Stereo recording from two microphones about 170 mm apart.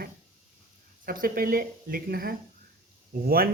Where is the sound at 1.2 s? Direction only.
60° right (ahead or behind).